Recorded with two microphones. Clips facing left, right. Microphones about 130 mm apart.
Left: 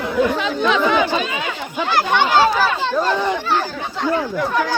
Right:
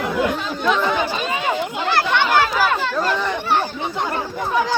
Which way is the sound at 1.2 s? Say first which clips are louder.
Right 2 dB; 40° right (ahead or behind).